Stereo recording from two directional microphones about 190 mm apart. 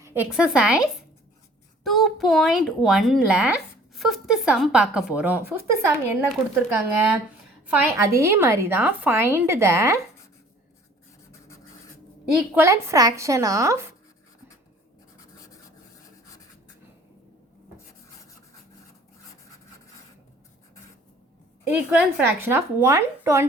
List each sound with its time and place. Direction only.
0.0 s a woman's voice: 10° right (ahead or behind)
11.3 s filing: 15° left (ahead or behind)
12.3 s a woman's voice: 10° right (ahead or behind)
15.2 s rub: 15° left (ahead or behind)
21.7 s a woman's voice: 10° right (ahead or behind)